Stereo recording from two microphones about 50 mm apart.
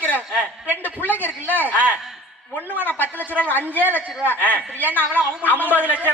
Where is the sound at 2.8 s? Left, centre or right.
Left.